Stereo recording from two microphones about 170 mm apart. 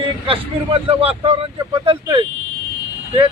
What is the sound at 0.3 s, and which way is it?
A man's voice, 35° right (ahead or behind).